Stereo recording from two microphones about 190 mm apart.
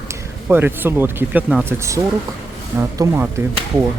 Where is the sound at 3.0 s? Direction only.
20° right (ahead or behind).